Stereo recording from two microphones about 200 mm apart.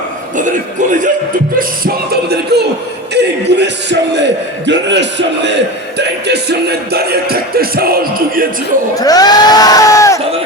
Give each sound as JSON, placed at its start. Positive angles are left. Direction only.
{"t": 0.3, "sound": "a man's voice", "side_deg": -40}
{"t": 1.5, "sound": "music", "side_deg": -50}
{"t": 3.2, "sound": "a man's voice", "side_deg": -60}
{"t": 6.0, "sound": "music", "side_deg": -55}
{"t": 9.0, "sound": "speech", "side_deg": 20}